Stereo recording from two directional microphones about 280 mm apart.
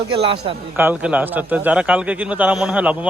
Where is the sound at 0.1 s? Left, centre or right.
Centre.